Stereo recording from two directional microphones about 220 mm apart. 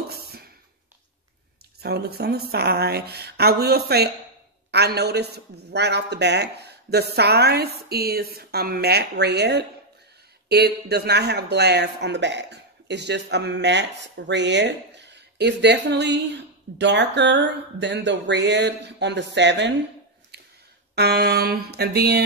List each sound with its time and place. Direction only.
0.1 s a sound: 45° right (ahead or behind)
1.8 s speech: 45° right (ahead or behind)
20.9 s speech: 50° right (ahead or behind)